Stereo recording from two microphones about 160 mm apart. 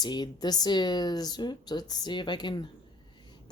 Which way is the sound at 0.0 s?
25° left (ahead or behind).